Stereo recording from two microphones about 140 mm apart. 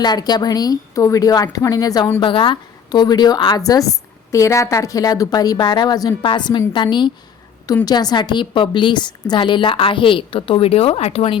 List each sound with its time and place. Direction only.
0.0 s a woman's voice: 30° left (ahead or behind); by 11.3 s 45° left (ahead or behind)